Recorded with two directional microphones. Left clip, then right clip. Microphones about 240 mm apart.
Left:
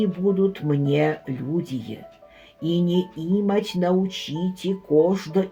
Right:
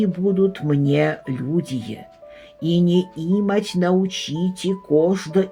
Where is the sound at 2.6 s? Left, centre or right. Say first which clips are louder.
Right 3 dB; right.